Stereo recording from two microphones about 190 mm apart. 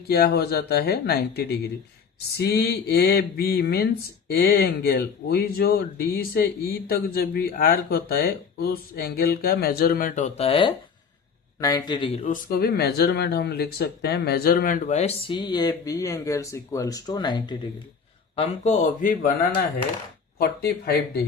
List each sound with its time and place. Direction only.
0.1 s speech: 55° left (ahead or behind); by 12.2 s 25° left (ahead or behind)
12.2 s speech: 50° left (ahead or behind)
15.3 s speech: 25° left (ahead or behind)
18.3 s speech: 35° left (ahead or behind); by 20.9 s 55° left (ahead or behind)